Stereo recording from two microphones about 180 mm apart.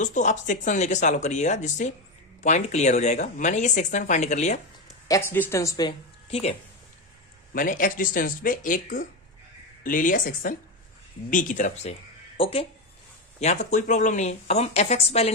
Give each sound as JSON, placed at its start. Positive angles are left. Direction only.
{"t": 0.0, "sound": "speech", "side_deg": 45}
{"t": 5.0, "sound": "speech", "side_deg": 15}
{"t": 6.2, "sound": "speech", "side_deg": 35}
{"t": 7.5, "sound": "speech", "side_deg": 50}